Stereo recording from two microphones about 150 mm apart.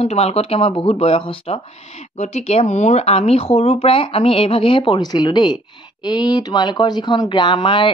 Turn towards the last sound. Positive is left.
turn(degrees=35)  # may be behind; listen again after turning